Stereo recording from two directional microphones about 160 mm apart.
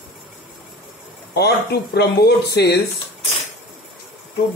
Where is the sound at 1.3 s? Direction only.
90° left.